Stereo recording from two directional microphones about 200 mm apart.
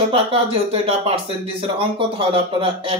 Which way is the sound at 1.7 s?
25° right (ahead or behind).